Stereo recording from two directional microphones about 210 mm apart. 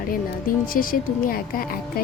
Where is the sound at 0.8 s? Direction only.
40° left (ahead or behind).